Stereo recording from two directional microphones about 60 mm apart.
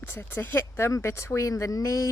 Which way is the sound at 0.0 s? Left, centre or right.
Left.